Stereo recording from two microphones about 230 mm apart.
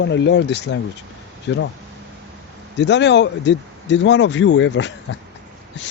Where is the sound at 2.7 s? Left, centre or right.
Left.